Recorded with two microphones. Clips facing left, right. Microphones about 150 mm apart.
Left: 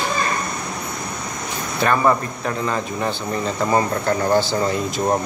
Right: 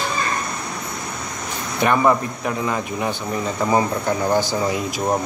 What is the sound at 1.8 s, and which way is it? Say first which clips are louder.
Speech: right 1 dB; 15° right (ahead or behind).